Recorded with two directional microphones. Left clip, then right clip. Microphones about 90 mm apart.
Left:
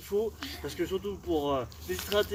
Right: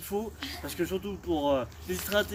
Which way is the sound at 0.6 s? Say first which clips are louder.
Even; 55° right (ahead or behind).